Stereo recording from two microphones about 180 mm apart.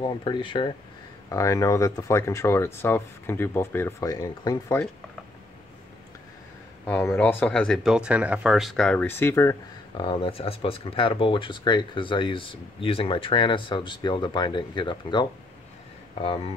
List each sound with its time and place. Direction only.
0.0 s speech: 25° left (ahead or behind)
6.9 s speech: 10° left (ahead or behind); by 16.5 s 30° left (ahead or behind)